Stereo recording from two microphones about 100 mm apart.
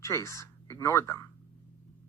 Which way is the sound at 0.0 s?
30° left (ahead or behind).